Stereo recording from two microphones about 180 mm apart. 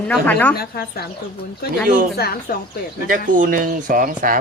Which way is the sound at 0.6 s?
60° left (ahead or behind).